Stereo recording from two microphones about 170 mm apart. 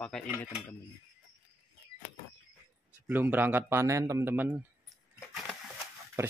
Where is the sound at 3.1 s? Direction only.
10° right (ahead or behind).